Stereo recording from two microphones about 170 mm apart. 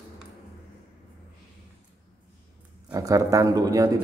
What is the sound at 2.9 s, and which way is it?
A man's voice, 20° right (ahead or behind).